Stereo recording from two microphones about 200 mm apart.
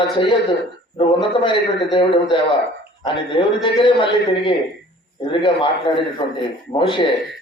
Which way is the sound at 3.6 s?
25° left (ahead or behind).